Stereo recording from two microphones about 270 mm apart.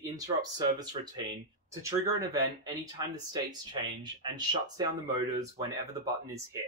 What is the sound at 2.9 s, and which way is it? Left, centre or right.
Speech, centre.